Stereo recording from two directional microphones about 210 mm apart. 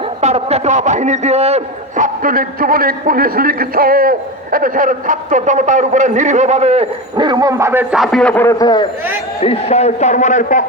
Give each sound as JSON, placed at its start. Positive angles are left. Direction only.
{"t": 0.2, "sound": "a man's voice", "side_deg": -30}
{"t": 9.4, "sound": "a man's voice", "side_deg": 30}